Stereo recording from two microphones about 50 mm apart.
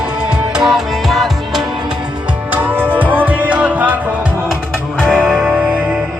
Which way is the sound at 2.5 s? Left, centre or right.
Right.